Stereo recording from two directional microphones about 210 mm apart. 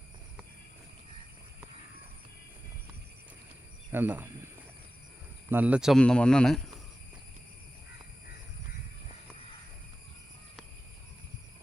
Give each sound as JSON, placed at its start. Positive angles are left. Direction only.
{"t": 3.9, "sound": "speech", "side_deg": -10}
{"t": 5.5, "sound": "speech", "side_deg": -10}